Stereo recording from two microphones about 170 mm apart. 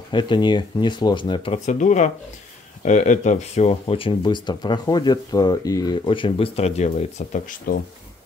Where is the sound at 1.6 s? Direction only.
45° left (ahead or behind).